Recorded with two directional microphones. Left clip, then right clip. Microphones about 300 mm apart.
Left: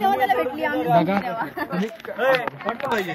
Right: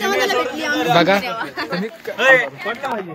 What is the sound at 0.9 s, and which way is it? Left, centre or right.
Speech, centre.